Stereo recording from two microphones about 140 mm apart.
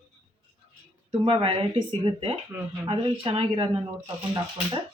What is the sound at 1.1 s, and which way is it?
Speech, 40° right (ahead or behind).